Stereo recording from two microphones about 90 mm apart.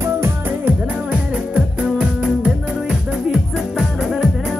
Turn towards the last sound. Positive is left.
turn(degrees=0)  # may be behind; listen again after turning